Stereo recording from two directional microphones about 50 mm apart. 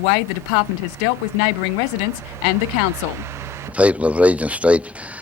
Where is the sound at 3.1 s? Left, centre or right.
Right.